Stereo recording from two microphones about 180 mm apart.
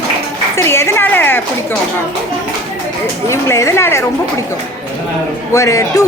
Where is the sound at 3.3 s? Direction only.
15° left (ahead or behind).